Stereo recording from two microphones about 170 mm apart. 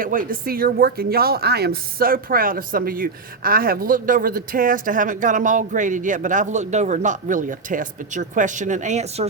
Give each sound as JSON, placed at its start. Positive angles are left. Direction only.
{"t": 0.0, "sound": "speech", "side_deg": -55}